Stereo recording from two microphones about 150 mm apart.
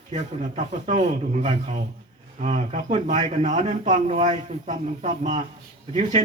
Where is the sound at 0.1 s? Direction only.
55° right (ahead or behind).